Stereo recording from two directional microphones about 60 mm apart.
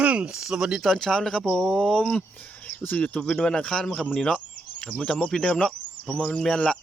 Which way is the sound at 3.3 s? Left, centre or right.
Centre.